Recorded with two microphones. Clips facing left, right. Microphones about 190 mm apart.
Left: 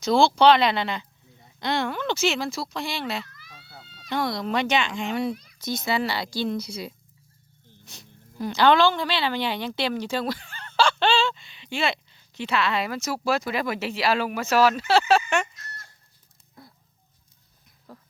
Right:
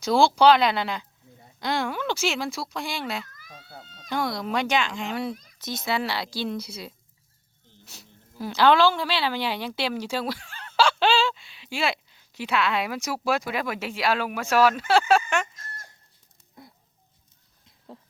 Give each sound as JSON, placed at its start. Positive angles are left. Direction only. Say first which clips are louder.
{"t": 0.0, "sound": "speech", "louder": "even", "side_deg": -5}
{"t": 3.2, "sound": "cat", "louder": "right 3 dB", "side_deg": -45}
{"t": 4.1, "sound": "speech", "louder": "left 1 dB", "side_deg": -5}
{"t": 13.0, "sound": "speech", "louder": "left 1 dB", "side_deg": -10}
{"t": 13.5, "sound": "speech", "louder": "left 2 dB", "side_deg": 0}
{"t": 16.6, "sound": "a sound", "louder": "right 1 dB", "side_deg": -20}